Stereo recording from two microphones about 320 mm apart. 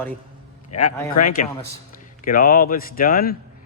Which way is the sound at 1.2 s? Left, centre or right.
Left.